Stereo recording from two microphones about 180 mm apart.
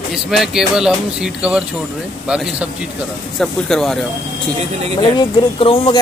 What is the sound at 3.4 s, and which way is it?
Speech, centre (ahead or behind).